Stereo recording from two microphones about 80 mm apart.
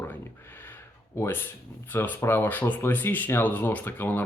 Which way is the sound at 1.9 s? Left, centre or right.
Left.